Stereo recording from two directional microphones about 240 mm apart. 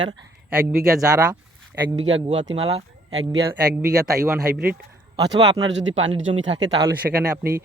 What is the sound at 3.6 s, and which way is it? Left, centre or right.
Speech, centre.